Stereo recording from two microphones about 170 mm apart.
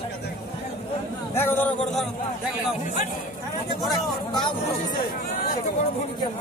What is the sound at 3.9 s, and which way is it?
Speech, 25° left (ahead or behind).